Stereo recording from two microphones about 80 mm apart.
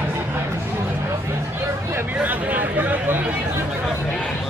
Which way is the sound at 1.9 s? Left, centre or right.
Right.